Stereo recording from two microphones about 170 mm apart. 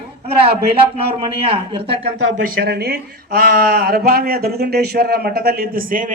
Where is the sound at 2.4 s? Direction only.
65° right (ahead or behind).